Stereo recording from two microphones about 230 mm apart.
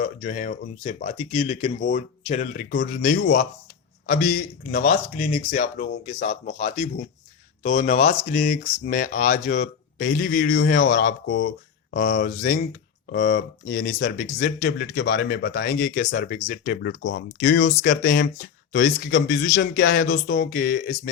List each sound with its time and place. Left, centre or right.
0.0 s speech: left
2.8 s speech: left
8.3 s speech: left